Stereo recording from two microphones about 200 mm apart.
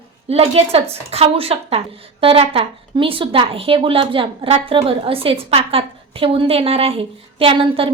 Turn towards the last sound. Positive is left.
turn(degrees=-25)  # may be behind; listen again after turning